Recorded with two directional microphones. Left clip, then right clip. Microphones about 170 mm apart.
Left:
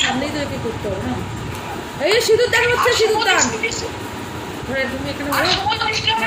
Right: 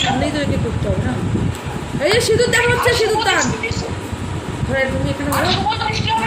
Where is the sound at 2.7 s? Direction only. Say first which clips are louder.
Even; 10° left (ahead or behind).